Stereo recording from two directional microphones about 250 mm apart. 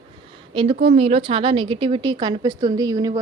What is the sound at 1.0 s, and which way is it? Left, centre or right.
A woman's voice, right.